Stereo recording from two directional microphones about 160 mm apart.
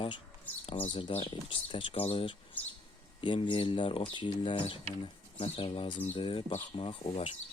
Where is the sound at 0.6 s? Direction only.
35° left (ahead or behind).